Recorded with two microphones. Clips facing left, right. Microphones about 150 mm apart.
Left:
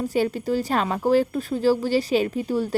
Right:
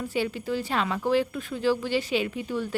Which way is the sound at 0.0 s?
40° left (ahead or behind).